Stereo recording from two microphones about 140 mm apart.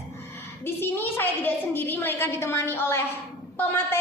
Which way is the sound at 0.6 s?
15° left (ahead or behind).